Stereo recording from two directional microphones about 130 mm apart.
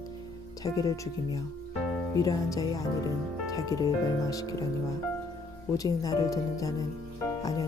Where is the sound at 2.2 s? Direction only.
25° left (ahead or behind).